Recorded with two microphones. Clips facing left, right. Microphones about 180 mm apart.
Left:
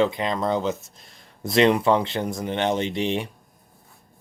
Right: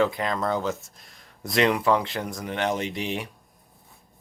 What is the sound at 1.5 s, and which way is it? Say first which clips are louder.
Speech: left 3 dB; 30° left (ahead or behind).